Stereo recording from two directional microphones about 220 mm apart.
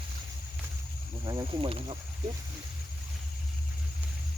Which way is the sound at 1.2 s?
20° right (ahead or behind).